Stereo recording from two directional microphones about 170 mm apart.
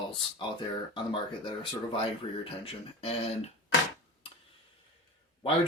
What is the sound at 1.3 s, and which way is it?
Speech, 30° left (ahead or behind).